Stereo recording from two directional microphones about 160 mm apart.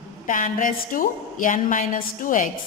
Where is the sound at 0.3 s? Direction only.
55° left (ahead or behind).